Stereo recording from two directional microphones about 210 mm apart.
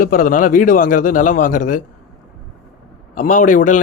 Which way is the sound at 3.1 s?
40° left (ahead or behind).